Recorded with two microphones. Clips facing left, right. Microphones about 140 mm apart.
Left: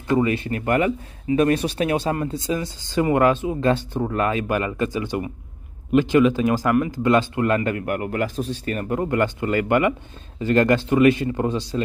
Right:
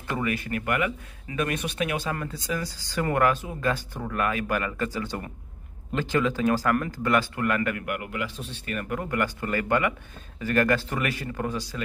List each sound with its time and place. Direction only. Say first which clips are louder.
0.2 s speech: left 6 dB; 25° left (ahead or behind)